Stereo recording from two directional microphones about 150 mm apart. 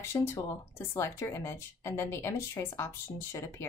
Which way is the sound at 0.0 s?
15° left (ahead or behind).